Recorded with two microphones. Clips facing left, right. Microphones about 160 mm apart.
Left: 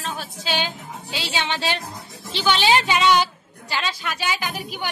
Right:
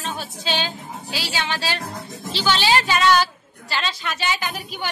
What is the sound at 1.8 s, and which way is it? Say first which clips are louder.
Bleat: right 4 dB; 60° right (ahead or behind).